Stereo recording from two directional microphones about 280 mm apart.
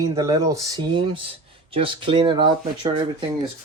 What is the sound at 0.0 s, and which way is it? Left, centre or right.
Speech, centre.